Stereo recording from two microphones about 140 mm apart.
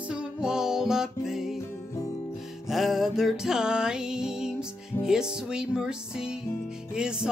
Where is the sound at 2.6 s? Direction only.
Centre (ahead or behind).